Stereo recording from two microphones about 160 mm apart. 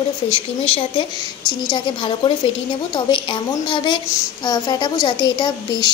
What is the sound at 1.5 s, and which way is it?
A woman's voice, 30° left (ahead or behind).